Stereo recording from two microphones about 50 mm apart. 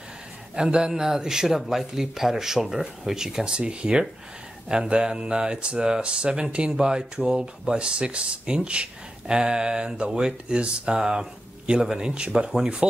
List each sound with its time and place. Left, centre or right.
0.6 s speech: centre